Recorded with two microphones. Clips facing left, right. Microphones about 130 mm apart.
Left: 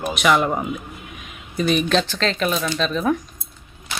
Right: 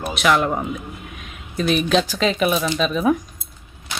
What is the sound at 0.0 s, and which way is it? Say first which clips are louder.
A man's voice: even; centre (ahead or behind).